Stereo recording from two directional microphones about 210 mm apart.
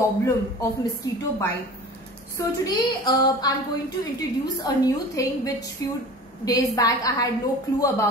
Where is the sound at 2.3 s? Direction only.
15° left (ahead or behind).